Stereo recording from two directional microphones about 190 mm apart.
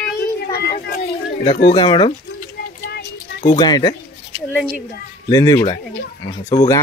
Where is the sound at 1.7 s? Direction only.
25° left (ahead or behind).